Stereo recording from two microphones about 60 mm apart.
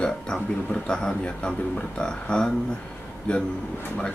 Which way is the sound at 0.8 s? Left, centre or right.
Centre.